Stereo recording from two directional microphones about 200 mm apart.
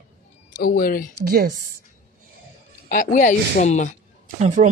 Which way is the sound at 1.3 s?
45° right (ahead or behind).